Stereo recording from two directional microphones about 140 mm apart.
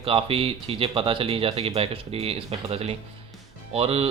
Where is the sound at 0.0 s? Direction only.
40° right (ahead or behind).